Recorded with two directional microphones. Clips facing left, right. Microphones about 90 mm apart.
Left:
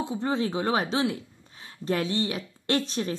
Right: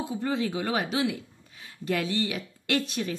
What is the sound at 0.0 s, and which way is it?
A woman's voice, 25° left (ahead or behind).